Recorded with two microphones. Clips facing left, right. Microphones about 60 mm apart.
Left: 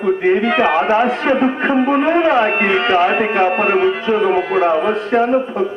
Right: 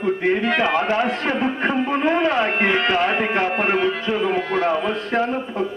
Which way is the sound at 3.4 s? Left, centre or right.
Left.